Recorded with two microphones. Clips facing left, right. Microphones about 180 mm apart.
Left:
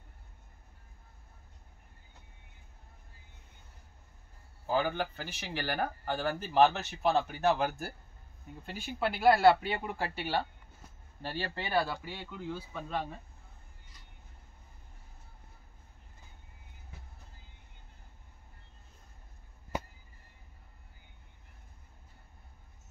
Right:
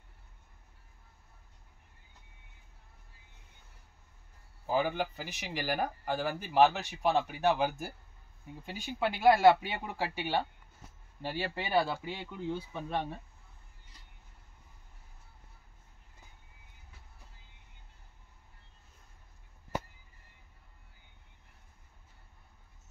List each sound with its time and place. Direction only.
4.6 s speech: 15° right (ahead or behind)